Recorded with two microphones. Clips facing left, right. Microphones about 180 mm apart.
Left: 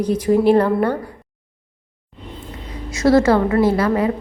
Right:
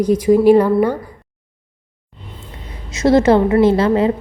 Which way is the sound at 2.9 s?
20° right (ahead or behind).